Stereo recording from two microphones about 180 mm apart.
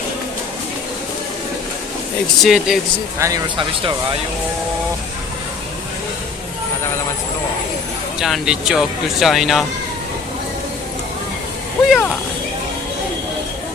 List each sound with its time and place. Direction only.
2.4 s speech: centre (ahead or behind)
3.2 s speech: 15° right (ahead or behind)
8.2 s speech: centre (ahead or behind)
11.9 s speech: 5° left (ahead or behind)